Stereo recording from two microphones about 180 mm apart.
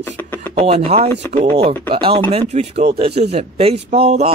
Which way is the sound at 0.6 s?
35° right (ahead or behind).